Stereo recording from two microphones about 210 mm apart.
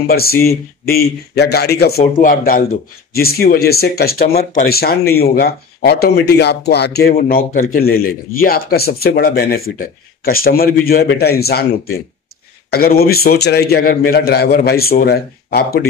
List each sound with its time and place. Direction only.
0.0 s speech: 45° left (ahead or behind)
12.7 s speech: 45° left (ahead or behind)